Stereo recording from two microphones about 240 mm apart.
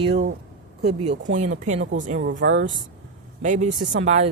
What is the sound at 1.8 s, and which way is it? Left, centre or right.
Speech, right.